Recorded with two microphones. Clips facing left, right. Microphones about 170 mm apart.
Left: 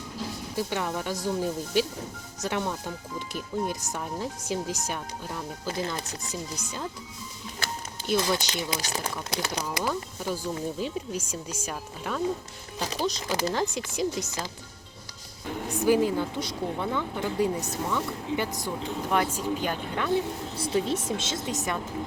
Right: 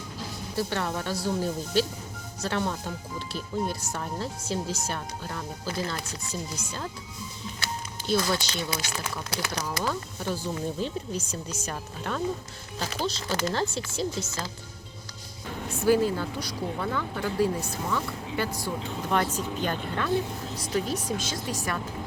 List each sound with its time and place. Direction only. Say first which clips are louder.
0.5 s speech: right 1 dB; 15° left (ahead or behind)
5.6 s speech: left 1 dB; 20° left (ahead or behind)
8.0 s speech: even; 15° left (ahead or behind)
15.8 s speech: even; 15° left (ahead or behind)
20.6 s speech: left 2 dB; 25° left (ahead or behind)